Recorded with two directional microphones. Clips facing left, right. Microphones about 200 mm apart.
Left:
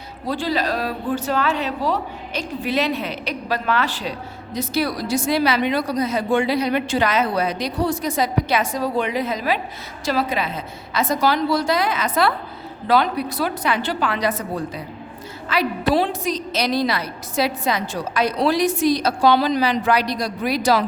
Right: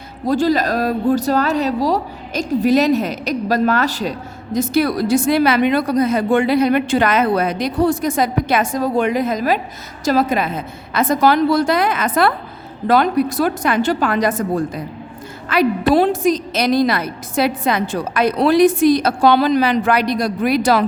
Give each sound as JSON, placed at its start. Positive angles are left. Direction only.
{"t": 0.3, "sound": "a woman's voice", "side_deg": -45}